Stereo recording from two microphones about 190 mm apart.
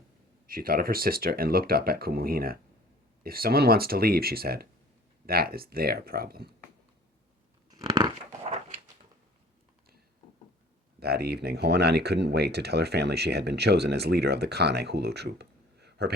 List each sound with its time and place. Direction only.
0.4 s speech: 50° right (ahead or behind)
7.7 s crunch: 20° right (ahead or behind)
11.0 s speech: 55° right (ahead or behind)